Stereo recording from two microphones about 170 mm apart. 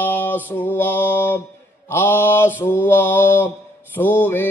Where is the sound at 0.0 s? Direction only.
10° left (ahead or behind).